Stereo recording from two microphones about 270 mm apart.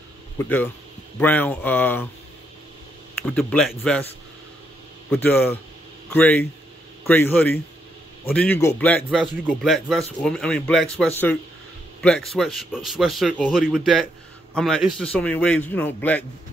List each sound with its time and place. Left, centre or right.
0.4 s speech: centre
3.3 s a man's voice: centre
5.1 s a man's voice: centre